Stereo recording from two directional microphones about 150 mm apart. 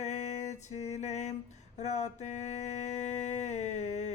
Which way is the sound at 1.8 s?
50° left (ahead or behind).